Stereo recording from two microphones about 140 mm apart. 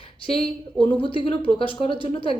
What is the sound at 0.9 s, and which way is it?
Speech, 40° left (ahead or behind).